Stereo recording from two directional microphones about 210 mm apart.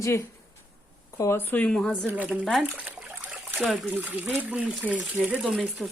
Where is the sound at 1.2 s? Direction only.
10° left (ahead or behind).